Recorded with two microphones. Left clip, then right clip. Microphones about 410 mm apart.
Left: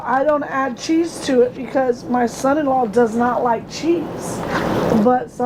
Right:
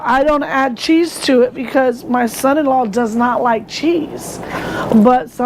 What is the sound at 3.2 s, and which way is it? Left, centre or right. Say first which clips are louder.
Speech: right 3 dB; right.